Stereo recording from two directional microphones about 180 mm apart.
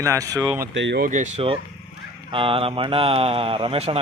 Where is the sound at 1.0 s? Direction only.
40° right (ahead or behind).